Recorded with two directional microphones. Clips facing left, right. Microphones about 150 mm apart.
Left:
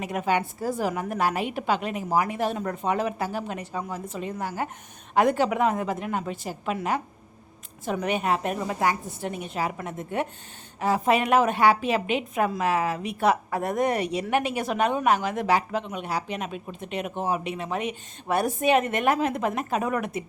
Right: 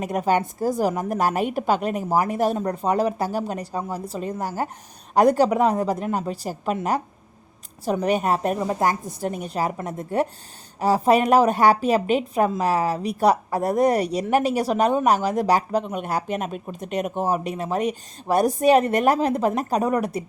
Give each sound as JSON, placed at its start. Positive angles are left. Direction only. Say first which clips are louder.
{"t": 0.0, "sound": "a woman's voice", "louder": "right 4 dB", "side_deg": -40}